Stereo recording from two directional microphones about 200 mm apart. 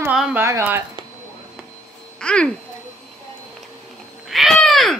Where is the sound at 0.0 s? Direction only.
5° right (ahead or behind).